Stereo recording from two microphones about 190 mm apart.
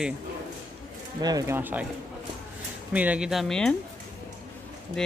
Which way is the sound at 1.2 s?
20° right (ahead or behind).